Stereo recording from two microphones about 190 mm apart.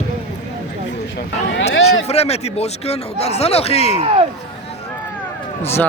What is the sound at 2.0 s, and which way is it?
Speech, 35° left (ahead or behind).